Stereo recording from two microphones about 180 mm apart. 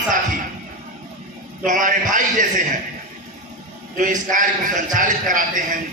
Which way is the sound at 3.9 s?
45° right (ahead or behind).